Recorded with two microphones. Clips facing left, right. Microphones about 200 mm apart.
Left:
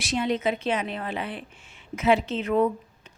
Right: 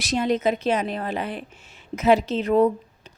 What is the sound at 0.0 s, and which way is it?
A woman's voice, 40° right (ahead or behind).